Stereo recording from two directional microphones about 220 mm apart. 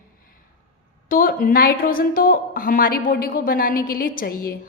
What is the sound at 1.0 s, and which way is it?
A woman's voice, 40° left (ahead or behind).